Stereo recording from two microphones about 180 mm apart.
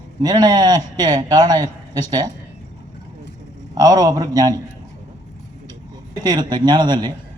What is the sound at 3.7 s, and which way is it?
Speech, 20° right (ahead or behind).